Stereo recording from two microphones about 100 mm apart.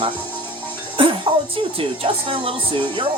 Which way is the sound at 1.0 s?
60° right (ahead or behind).